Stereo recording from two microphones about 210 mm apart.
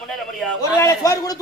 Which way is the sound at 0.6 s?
15° left (ahead or behind).